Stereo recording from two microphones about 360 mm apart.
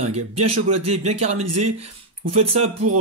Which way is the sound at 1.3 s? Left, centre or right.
Right.